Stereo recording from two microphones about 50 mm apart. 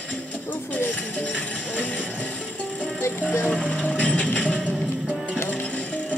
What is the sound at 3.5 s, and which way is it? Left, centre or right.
Music, left.